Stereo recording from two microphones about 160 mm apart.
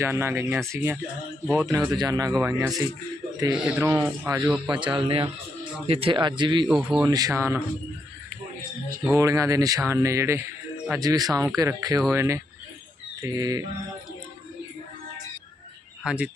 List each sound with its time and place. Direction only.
0.0 s a man's voice: 15° right (ahead or behind)
3.5 s a man's voice: 10° right (ahead or behind)
4.7 s speech: 30° right (ahead or behind)
6.7 s speech: 5° right (ahead or behind)
7.0 s speech: 25° right (ahead or behind)
9.0 s a man's voice: 20° right (ahead or behind)
16.0 s a man's voice: 10° right (ahead or behind)